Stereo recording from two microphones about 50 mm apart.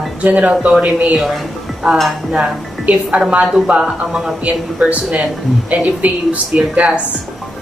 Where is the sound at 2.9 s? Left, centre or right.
Right.